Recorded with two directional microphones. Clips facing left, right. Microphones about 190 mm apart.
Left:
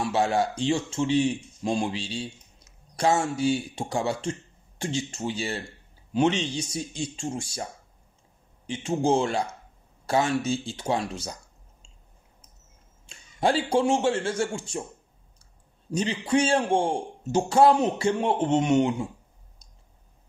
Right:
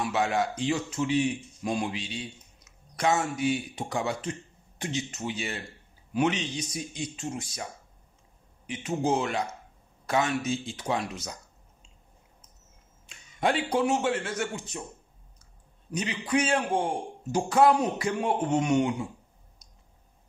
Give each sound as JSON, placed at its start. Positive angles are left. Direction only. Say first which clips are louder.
{"t": 0.0, "sound": "a man's voice", "louder": "left 3 dB", "side_deg": 30}
{"t": 8.6, "sound": "a man's voice", "louder": "left 3 dB", "side_deg": 25}
{"t": 13.1, "sound": "speech", "louder": "left 3 dB", "side_deg": 30}
{"t": 15.9, "sound": "a man's voice", "louder": "left 4 dB", "side_deg": 30}